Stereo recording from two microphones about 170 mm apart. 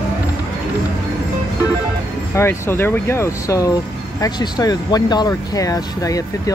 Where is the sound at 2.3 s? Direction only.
15° left (ahead or behind).